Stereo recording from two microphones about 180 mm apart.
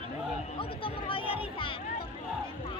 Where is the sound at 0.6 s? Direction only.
30° left (ahead or behind).